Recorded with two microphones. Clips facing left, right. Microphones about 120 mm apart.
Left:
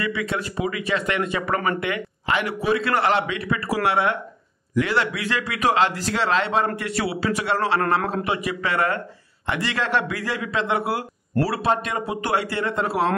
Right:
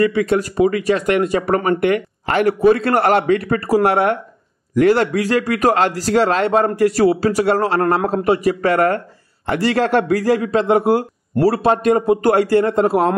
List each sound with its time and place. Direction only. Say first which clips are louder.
0.0 s a man's voice: right 10 dB; 45° right (ahead or behind)
1.8 s a man's voice: right 10 dB; 50° right (ahead or behind)